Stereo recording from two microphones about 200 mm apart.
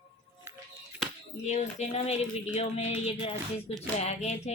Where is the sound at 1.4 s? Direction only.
35° left (ahead or behind).